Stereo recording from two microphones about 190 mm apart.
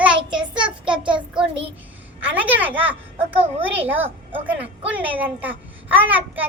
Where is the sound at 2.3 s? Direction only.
10° right (ahead or behind).